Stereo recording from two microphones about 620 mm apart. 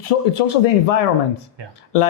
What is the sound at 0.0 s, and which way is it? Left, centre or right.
Speech, left.